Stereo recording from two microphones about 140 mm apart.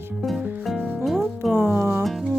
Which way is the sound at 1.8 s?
15° right (ahead or behind).